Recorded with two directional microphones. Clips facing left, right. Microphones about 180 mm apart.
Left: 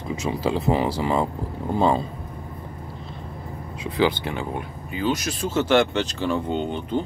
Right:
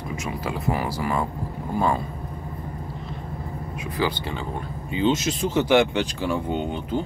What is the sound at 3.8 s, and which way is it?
Speech, 20° left (ahead or behind).